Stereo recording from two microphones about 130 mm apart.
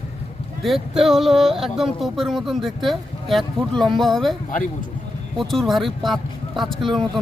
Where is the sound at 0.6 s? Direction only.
Centre (ahead or behind).